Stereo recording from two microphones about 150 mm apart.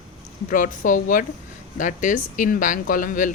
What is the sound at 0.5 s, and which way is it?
Speech, 60° left (ahead or behind).